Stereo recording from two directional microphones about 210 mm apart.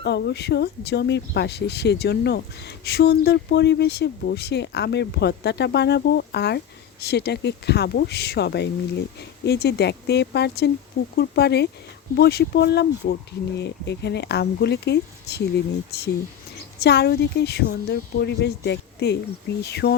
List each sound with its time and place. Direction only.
0.0 s speech: 55° left (ahead or behind)